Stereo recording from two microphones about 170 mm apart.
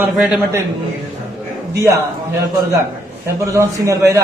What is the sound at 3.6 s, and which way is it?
Speech, 15° right (ahead or behind).